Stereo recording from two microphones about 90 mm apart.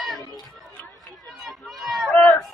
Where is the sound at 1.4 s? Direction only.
Centre (ahead or behind).